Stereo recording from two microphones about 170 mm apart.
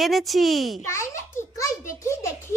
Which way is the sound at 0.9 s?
15° left (ahead or behind).